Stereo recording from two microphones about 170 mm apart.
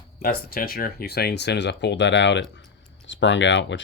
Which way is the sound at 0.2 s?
60° left (ahead or behind).